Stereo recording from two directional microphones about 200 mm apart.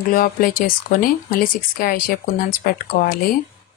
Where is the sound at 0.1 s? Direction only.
45° left (ahead or behind).